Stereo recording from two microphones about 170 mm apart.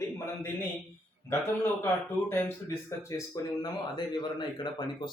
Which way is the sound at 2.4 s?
15° left (ahead or behind).